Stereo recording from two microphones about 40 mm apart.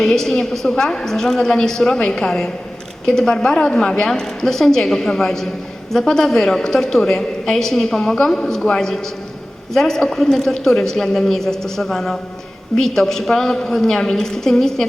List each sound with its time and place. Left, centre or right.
0.0 s a woman's voice: centre